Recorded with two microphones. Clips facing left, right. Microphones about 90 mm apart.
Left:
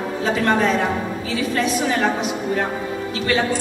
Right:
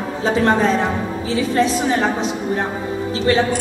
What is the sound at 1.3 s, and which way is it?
Music, 30° right (ahead or behind).